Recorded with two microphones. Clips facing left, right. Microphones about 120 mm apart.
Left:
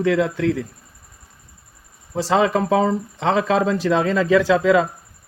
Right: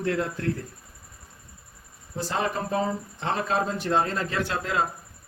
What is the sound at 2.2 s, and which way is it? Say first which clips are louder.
A man's voice: left 10 dB; 90° left.